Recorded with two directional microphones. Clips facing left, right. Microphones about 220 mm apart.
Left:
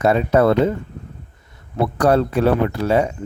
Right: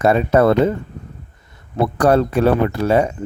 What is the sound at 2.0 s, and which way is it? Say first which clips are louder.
Speech: right 1 dB; 50° right (ahead or behind).